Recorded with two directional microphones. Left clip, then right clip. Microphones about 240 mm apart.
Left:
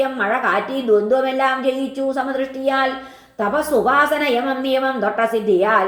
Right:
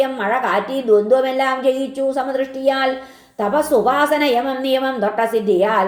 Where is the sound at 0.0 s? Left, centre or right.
Right.